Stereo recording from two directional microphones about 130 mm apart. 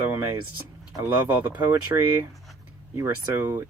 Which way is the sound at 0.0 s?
20° right (ahead or behind).